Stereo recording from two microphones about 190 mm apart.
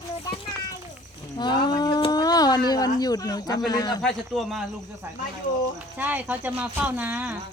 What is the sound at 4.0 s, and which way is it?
Speech, centre (ahead or behind).